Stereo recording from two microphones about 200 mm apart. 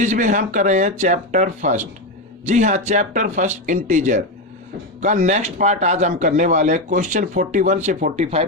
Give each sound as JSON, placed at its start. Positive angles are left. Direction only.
{"t": 0.0, "sound": "speech", "side_deg": -35}